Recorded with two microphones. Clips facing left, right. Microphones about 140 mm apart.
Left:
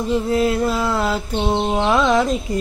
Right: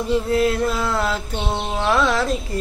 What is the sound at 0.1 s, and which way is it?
Mantra, centre (ahead or behind).